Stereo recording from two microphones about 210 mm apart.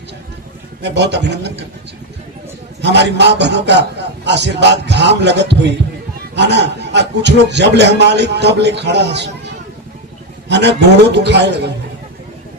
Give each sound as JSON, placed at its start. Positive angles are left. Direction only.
{"t": 0.8, "sound": "a man's voice", "side_deg": -55}
{"t": 2.8, "sound": "a man's voice", "side_deg": -55}
{"t": 10.5, "sound": "a man's voice", "side_deg": -55}